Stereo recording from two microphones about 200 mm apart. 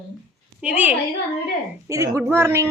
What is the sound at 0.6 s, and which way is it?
A woman's voice, 5° right (ahead or behind).